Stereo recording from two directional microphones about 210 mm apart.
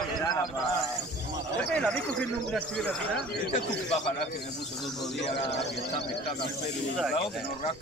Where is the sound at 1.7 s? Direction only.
5° left (ahead or behind).